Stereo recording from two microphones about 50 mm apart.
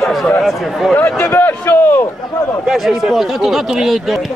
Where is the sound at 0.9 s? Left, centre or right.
Left.